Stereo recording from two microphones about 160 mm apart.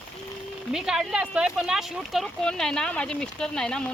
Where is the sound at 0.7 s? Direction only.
5° right (ahead or behind).